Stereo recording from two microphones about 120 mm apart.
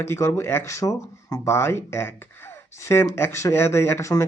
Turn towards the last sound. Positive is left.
turn(degrees=25)  # may be behind; listen again after turning